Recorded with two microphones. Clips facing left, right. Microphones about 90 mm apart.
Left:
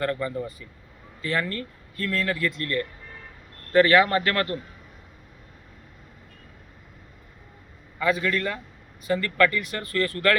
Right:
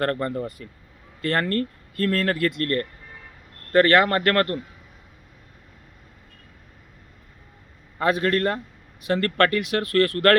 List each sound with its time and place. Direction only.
0.0 s a man's voice: 60° right (ahead or behind)
7.9 s a man's voice: 60° right (ahead or behind)